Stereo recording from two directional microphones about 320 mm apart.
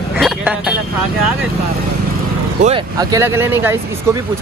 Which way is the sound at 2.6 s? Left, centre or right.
Centre.